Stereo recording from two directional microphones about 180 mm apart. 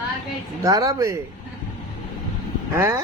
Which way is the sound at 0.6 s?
20° right (ahead or behind).